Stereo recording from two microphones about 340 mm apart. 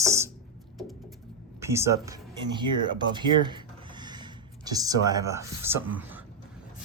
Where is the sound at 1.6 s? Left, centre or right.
Centre.